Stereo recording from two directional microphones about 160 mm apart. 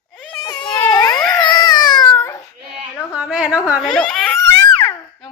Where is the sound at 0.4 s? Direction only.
25° left (ahead or behind).